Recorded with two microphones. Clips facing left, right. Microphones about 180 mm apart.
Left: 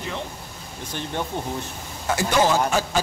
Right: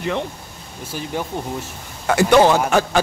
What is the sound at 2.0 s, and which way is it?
Speech, 65° right (ahead or behind).